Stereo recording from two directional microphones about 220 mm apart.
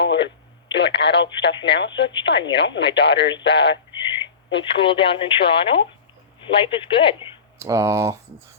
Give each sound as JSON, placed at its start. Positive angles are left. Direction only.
{"t": 0.0, "sound": "radio", "side_deg": 50}
{"t": 0.7, "sound": "speech", "side_deg": 50}
{"t": 4.7, "sound": "speech", "side_deg": 25}
{"t": 7.6, "sound": "speech", "side_deg": -10}